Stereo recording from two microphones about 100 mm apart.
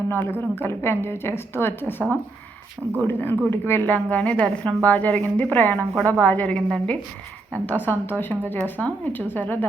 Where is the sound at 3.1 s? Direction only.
20° left (ahead or behind).